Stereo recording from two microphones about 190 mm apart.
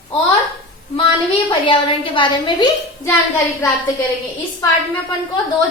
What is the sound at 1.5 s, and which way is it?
A woman's voice, 25° left (ahead or behind).